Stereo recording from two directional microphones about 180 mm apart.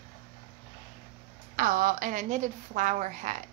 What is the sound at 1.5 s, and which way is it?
A woman's voice, 50° right (ahead or behind).